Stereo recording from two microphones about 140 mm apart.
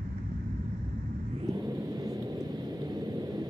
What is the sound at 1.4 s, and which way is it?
Vehicle, 30° right (ahead or behind).